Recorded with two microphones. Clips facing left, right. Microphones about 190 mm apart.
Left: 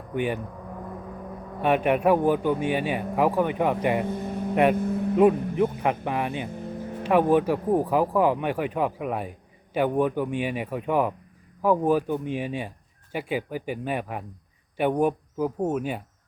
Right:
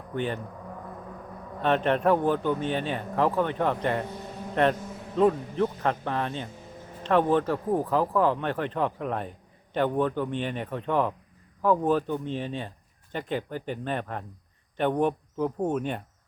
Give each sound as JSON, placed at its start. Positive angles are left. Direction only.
{"t": 0.1, "sound": "speech", "side_deg": 10}
{"t": 1.6, "sound": "speech", "side_deg": 10}
{"t": 4.8, "sound": "vehicle", "side_deg": 60}
{"t": 5.1, "sound": "speech", "side_deg": 15}